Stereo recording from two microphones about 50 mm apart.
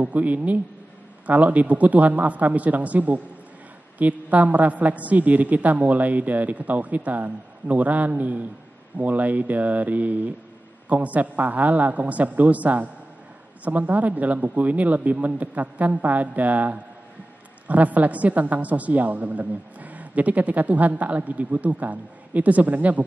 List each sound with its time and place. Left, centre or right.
0.0 s a woman's voice: right